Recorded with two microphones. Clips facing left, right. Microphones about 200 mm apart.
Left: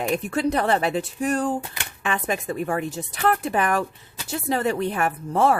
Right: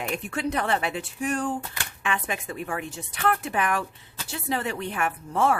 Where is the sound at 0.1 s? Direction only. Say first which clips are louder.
Left 6 dB; 40° left (ahead or behind).